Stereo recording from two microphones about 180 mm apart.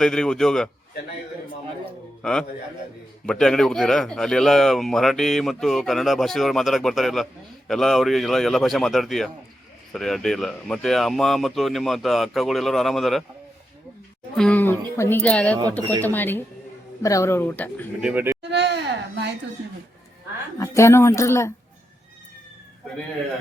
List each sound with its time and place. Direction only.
0.0 s speech: 5° left (ahead or behind)
2.2 s speech: 5° left (ahead or behind)
14.3 s speech: 5° left (ahead or behind)
18.0 s speech: 10° right (ahead or behind)
18.5 s a sound: 70° right (ahead or behind)
20.6 s speech: 15° left (ahead or behind)